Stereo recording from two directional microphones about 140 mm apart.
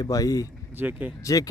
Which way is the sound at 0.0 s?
25° left (ahead or behind).